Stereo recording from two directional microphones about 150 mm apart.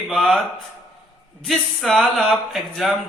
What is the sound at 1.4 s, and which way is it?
Speech, centre (ahead or behind).